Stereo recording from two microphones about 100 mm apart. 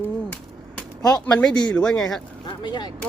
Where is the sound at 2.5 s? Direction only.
50° left (ahead or behind).